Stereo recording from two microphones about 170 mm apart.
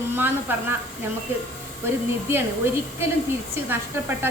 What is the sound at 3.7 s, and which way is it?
Speech, 15° right (ahead or behind).